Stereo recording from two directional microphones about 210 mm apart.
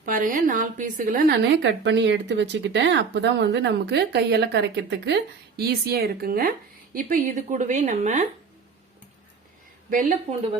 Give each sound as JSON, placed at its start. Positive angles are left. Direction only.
{"t": 0.0, "sound": "a woman's voice", "side_deg": -40}
{"t": 1.6, "sound": "a woman's voice", "side_deg": -60}
{"t": 9.9, "sound": "a woman's voice", "side_deg": -40}